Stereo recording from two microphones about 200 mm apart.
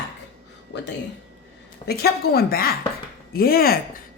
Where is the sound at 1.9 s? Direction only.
50° left (ahead or behind).